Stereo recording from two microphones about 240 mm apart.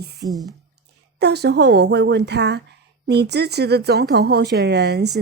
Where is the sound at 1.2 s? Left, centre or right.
Right.